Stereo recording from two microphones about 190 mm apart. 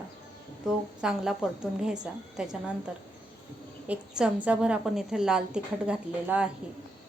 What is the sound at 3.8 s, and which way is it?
A woman's voice, 5° right (ahead or behind).